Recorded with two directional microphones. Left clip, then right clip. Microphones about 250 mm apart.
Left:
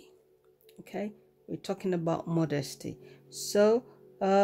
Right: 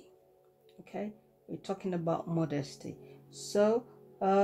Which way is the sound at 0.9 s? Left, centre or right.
Left.